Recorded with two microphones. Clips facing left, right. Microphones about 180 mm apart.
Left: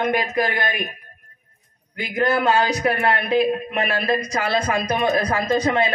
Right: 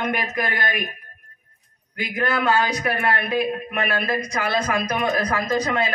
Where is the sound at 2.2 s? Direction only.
25° left (ahead or behind).